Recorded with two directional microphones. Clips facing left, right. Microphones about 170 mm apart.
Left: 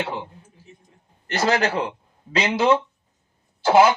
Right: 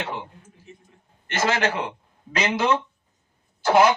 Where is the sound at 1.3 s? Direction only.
35° left (ahead or behind).